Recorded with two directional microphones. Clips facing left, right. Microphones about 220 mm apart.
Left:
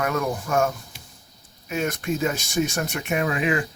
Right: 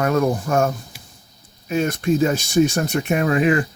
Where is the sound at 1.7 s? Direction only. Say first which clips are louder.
Right 6 dB; 30° right (ahead or behind).